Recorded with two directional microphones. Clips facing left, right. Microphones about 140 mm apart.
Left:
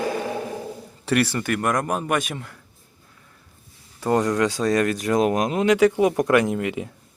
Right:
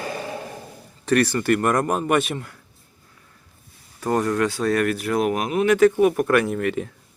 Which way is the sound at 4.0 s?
15° left (ahead or behind).